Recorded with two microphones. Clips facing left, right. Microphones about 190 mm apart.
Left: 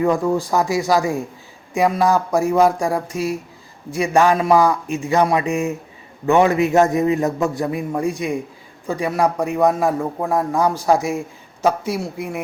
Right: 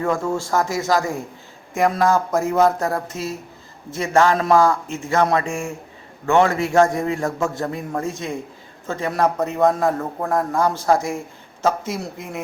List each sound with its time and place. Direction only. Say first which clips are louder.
0.0 s a man's voice: left 4 dB; 15° left (ahead or behind)